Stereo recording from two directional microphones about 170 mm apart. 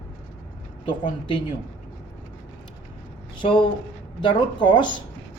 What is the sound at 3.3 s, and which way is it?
Speech, 30° left (ahead or behind).